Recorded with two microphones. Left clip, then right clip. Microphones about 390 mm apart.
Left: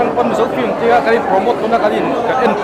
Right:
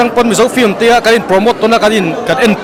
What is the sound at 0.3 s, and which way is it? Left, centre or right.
Speech, right.